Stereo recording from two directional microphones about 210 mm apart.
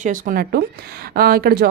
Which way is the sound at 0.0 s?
40° right (ahead or behind).